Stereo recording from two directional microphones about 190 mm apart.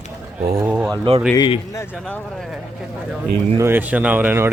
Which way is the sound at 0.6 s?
5° right (ahead or behind).